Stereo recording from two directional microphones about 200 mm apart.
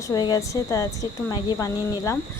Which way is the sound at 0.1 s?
20° left (ahead or behind).